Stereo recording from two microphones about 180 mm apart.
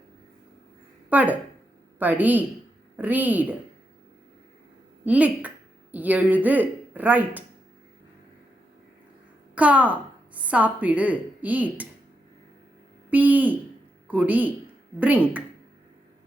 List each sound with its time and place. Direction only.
1.1 s speech: 10° right (ahead or behind)
5.0 s speech: 10° right (ahead or behind)
9.6 s speech: 10° right (ahead or behind)
13.1 s speech: 10° right (ahead or behind)